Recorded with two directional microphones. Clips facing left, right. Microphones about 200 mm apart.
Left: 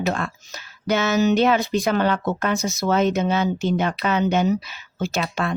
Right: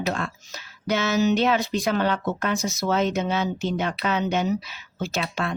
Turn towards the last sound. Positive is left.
turn(degrees=50)  # may be behind; listen again after turning